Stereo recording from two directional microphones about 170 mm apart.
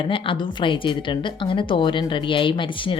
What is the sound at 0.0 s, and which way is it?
A woman's voice, 30° left (ahead or behind).